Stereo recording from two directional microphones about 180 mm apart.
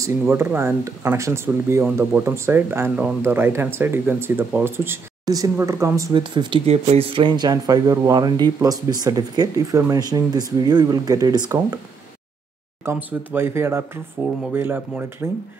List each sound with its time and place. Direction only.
0.0 s speech: 10° right (ahead or behind)
12.8 s speech: 15° right (ahead or behind)